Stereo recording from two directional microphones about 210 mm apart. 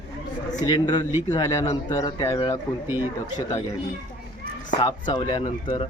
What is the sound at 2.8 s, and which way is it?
Speech, 10° right (ahead or behind).